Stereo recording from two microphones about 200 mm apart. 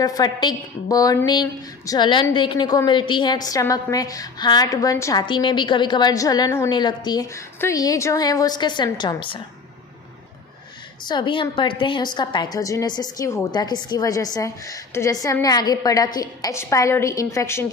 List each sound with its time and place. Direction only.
0.0 s a woman's voice: 20° left (ahead or behind)
11.1 s a woman's voice: 25° left (ahead or behind)